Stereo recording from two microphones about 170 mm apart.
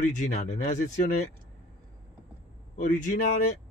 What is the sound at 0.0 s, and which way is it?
Speech, 45° left (ahead or behind).